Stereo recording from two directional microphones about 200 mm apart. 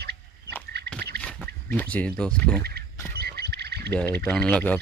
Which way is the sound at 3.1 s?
50° right (ahead or behind).